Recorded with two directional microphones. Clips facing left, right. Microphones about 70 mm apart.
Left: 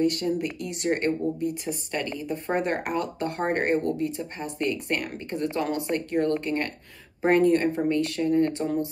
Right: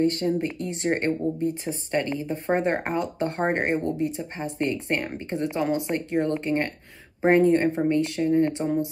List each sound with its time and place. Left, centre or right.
0.0 s speech: right